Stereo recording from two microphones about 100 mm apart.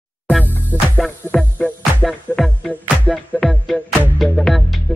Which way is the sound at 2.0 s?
5° left (ahead or behind).